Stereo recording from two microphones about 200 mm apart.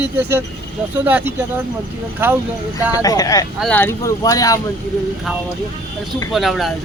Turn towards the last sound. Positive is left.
turn(degrees=0)  # may be behind; listen again after turning